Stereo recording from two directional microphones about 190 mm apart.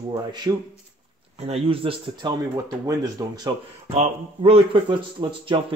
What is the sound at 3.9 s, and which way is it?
Speech, 30° right (ahead or behind).